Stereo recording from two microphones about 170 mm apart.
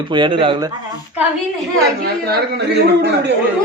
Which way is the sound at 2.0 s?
70° right (ahead or behind).